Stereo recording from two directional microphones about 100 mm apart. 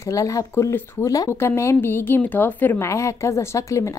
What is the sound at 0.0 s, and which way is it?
Speech, 35° left (ahead or behind).